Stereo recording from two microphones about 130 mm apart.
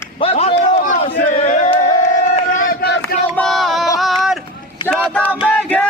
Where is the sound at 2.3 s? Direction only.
70° left (ahead or behind).